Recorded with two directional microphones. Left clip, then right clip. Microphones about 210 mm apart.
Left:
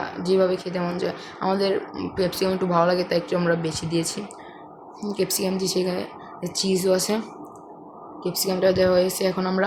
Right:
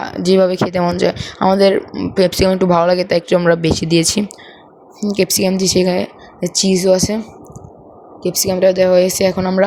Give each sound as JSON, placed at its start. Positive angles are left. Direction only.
{"t": 0.0, "sound": "speech", "side_deg": -40}
{"t": 8.2, "sound": "speech", "side_deg": -30}